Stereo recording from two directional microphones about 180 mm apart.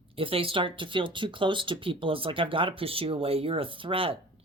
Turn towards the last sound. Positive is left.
turn(degrees=-30)  # may be behind; listen again after turning